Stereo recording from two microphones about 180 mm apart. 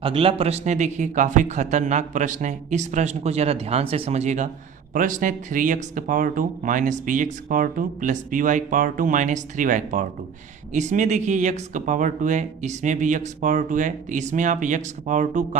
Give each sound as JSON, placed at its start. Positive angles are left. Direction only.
{"t": 0.0, "sound": "speech", "side_deg": -30}